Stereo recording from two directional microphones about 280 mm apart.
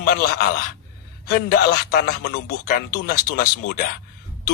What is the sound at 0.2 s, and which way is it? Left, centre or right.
A man's voice, left.